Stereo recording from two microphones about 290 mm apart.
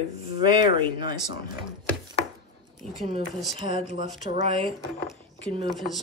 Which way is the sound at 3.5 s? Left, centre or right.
Centre.